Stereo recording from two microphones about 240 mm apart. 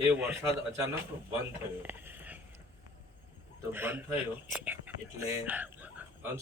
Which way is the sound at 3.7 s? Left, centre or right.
Centre.